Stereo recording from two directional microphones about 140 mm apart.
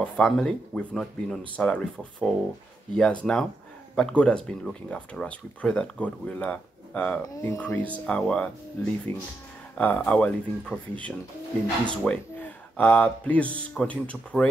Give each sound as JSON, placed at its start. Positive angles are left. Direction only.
{"t": 0.0, "sound": "speech", "side_deg": 5}